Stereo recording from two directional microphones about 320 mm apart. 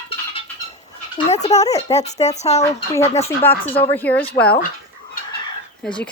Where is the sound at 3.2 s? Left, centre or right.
Centre.